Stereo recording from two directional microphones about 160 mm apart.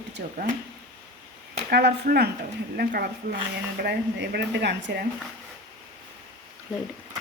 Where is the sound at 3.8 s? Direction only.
90° right.